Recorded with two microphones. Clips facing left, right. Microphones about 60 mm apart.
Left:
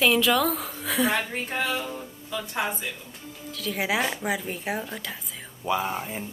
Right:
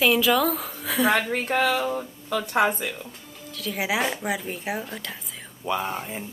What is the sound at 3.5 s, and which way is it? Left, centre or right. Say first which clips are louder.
A woman's voice: even; centre.